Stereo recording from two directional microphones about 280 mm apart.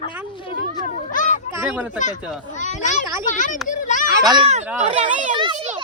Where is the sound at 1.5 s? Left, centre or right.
Centre.